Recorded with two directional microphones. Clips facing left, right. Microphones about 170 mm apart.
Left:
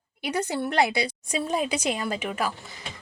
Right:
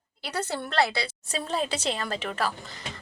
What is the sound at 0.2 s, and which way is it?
A woman's voice, 10° left (ahead or behind).